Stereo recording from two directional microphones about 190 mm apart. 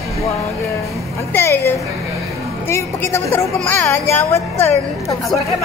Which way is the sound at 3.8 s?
15° left (ahead or behind).